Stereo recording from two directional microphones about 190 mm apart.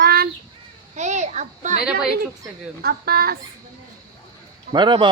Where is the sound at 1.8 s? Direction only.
5° right (ahead or behind).